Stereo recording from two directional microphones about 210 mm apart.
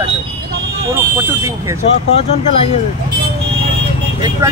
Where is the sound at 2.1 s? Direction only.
30° left (ahead or behind).